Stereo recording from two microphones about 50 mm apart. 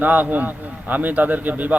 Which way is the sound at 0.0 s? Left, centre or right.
Right.